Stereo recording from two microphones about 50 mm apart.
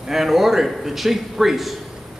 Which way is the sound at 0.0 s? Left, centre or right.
Centre.